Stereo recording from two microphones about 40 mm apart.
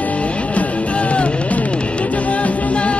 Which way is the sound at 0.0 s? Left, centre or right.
Left.